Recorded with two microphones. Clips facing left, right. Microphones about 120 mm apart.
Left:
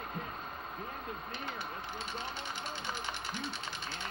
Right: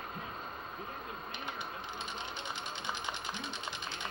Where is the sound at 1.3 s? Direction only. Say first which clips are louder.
Left 1 dB; 20° right (ahead or behind).